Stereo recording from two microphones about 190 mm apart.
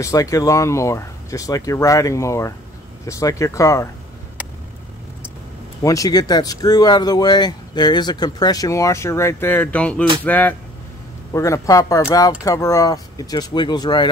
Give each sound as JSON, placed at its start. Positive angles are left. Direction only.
{"t": 0.0, "sound": "speech", "side_deg": 15}
{"t": 5.8, "sound": "speech", "side_deg": 15}